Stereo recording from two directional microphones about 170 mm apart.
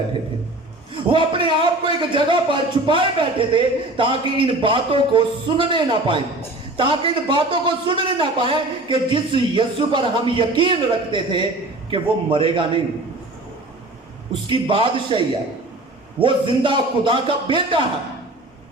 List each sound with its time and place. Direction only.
1.1 s a man's voice: 30° right (ahead or behind)
14.4 s a man's voice: 30° right (ahead or behind)
16.2 s a man's voice: 30° right (ahead or behind)